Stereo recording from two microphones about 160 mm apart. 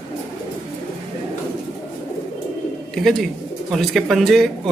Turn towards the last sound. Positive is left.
turn(degrees=0)  # may be behind; listen again after turning